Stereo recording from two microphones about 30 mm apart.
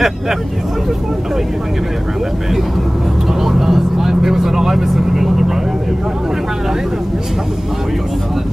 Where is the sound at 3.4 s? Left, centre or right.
Centre.